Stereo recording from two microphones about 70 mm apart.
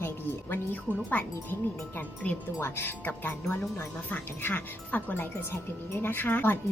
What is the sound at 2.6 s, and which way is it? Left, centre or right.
A woman's voice, left.